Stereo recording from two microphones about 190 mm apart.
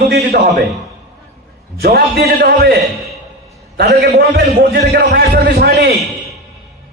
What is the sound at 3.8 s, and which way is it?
A man's voice, 60° right (ahead or behind).